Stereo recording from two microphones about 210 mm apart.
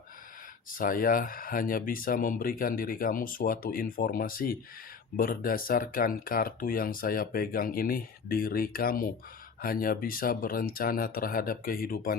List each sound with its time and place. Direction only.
0.8 s speech: 40° left (ahead or behind)